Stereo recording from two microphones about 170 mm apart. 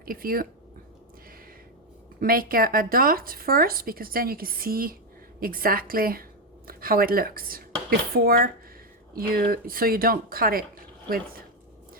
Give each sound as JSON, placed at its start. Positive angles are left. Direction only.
{"t": 0.0, "sound": "speech", "side_deg": -60}
{"t": 2.2, "sound": "speech", "side_deg": -60}